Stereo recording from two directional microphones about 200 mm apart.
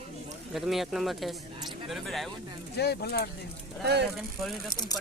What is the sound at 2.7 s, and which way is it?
Speech, 55° left (ahead or behind).